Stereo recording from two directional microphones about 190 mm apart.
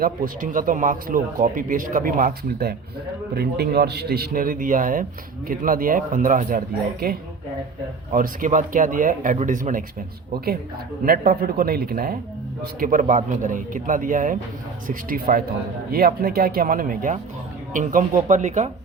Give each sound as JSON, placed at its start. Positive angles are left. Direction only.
{"t": 0.0, "sound": "a man's voice", "side_deg": -45}
{"t": 11.0, "sound": "speech", "side_deg": -50}